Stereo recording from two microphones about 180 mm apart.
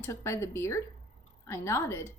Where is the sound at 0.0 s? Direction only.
15° left (ahead or behind).